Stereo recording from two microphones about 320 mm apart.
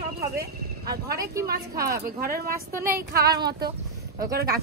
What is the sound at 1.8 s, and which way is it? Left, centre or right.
Speech, right.